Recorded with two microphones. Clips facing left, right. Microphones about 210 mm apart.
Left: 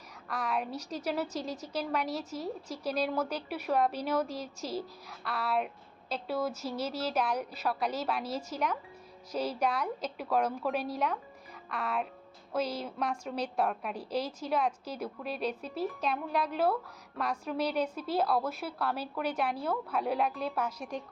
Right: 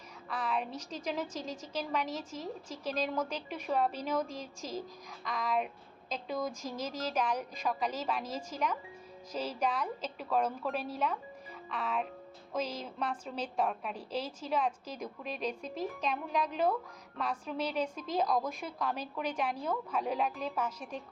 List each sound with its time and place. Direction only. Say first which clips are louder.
0.3 s a woman's voice: left 1 dB; 10° left (ahead or behind)